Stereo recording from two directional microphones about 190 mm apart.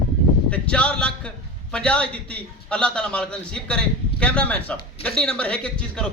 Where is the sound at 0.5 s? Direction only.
5° left (ahead or behind).